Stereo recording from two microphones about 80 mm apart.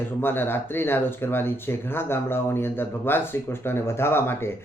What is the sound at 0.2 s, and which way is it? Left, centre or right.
A man's voice, left.